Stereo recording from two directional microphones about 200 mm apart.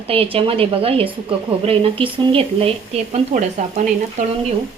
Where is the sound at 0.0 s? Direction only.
30° right (ahead or behind).